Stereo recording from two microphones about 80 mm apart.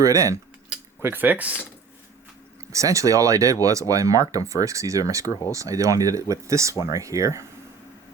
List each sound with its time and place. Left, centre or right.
0.0 s speech: right
1.0 s speech: right
2.7 s speech: right